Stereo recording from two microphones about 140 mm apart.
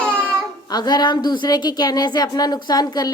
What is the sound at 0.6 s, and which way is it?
A woman's voice, 30° left (ahead or behind).